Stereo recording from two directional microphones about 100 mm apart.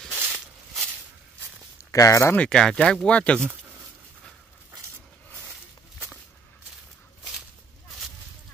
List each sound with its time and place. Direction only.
0.1 s a sound: 15° right (ahead or behind)
1.9 s speech: 35° left (ahead or behind)
2.3 s speech: 10° left (ahead or behind)